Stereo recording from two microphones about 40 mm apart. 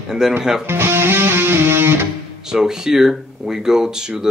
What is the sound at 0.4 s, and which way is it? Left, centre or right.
Speech, centre.